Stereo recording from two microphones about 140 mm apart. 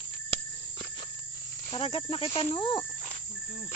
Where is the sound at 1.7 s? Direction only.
40° left (ahead or behind).